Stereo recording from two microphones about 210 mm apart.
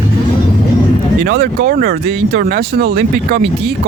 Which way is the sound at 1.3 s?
50° right (ahead or behind).